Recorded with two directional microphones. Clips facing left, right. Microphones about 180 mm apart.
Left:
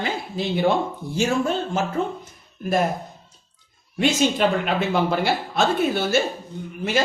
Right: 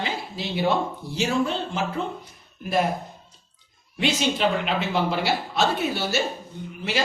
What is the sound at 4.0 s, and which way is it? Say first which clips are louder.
A man's voice: left 4 dB; 50° left (ahead or behind).